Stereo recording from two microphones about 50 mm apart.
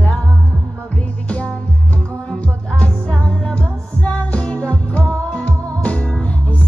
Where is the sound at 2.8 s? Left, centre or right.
Centre.